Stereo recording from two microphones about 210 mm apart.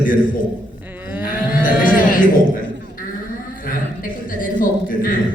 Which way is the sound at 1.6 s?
40° left (ahead or behind).